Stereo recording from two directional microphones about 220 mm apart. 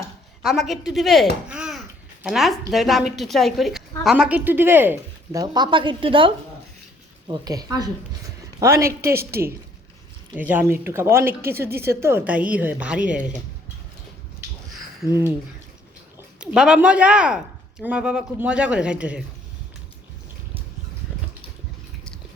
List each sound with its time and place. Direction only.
0.4 s speech: centre (ahead or behind)
10.3 s speech: 5° right (ahead or behind)
16.1 s speech: 5° right (ahead or behind)